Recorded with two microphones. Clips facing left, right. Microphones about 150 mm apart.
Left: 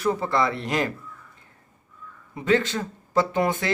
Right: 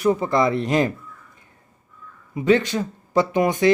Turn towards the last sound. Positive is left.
turn(degrees=-20)  # may be behind; listen again after turning